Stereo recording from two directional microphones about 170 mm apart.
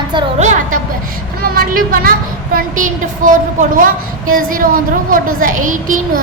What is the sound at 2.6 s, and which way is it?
A woman's voice, 50° right (ahead or behind).